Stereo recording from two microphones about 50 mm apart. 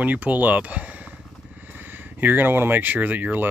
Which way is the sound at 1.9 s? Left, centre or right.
Right.